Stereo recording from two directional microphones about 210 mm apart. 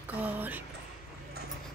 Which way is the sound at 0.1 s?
10° right (ahead or behind).